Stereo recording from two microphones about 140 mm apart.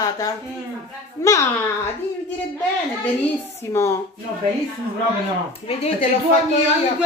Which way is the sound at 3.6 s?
20° left (ahead or behind).